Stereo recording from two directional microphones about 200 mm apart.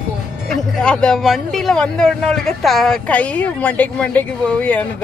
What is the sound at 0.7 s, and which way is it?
A man's voice, 5° left (ahead or behind).